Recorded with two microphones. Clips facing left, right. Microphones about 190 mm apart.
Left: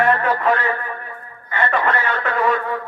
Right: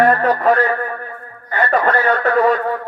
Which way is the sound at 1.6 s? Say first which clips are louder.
Right 4 dB; 40° right (ahead or behind).